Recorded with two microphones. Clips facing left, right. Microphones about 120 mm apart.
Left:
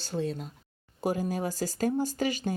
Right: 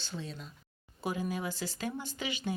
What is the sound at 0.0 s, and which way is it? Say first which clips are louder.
Speech: left 10 dB; 45° left (ahead or behind).